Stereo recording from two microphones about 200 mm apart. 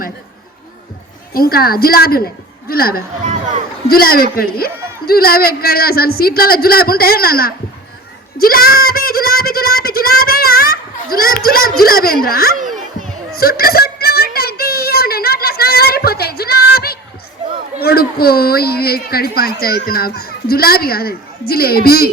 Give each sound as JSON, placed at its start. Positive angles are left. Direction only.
{"t": 1.3, "sound": "a woman's voice", "side_deg": 50}
{"t": 8.4, "sound": "a sound", "side_deg": 50}
{"t": 17.7, "sound": "a woman's voice", "side_deg": 50}